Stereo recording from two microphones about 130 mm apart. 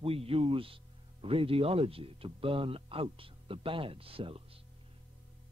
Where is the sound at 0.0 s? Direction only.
45° right (ahead or behind).